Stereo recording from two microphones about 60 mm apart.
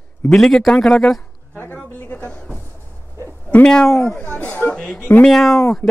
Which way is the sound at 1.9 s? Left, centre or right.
Left.